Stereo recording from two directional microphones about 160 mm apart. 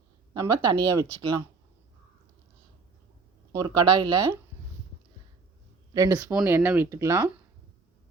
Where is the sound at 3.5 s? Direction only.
25° right (ahead or behind).